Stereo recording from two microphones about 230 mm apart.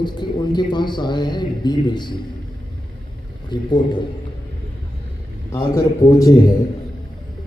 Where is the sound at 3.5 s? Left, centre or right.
Centre.